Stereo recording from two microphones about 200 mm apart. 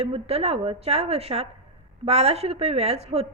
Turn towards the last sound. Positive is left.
turn(degrees=-30)  # may be behind; listen again after turning